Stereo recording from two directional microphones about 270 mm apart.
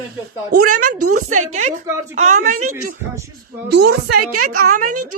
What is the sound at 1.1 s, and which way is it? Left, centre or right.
Speech, right.